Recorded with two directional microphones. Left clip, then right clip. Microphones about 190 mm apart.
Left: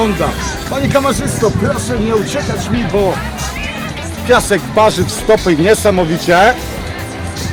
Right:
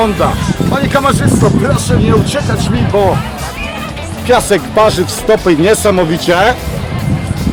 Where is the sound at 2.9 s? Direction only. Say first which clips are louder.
Right 3 dB; 15° right (ahead or behind).